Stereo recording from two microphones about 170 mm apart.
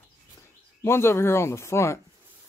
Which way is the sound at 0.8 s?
15° left (ahead or behind).